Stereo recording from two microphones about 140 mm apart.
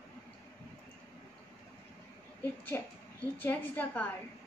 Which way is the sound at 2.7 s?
15° left (ahead or behind).